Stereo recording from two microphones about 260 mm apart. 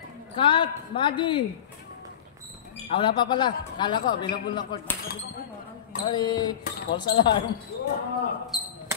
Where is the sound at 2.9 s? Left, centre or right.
Centre.